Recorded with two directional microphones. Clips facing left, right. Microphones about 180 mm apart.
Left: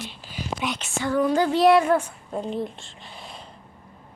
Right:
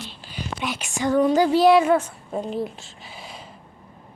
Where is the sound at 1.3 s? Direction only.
5° right (ahead or behind).